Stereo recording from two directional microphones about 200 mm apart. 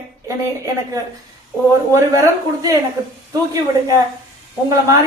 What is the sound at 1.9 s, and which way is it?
Speech, 15° right (ahead or behind).